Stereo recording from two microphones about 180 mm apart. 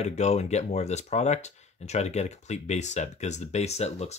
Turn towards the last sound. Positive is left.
turn(degrees=35)  # may be behind; listen again after turning